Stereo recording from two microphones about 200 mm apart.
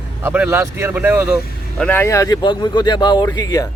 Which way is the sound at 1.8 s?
10° left (ahead or behind).